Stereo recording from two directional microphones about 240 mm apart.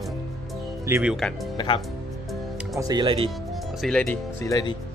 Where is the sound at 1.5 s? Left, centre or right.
Centre.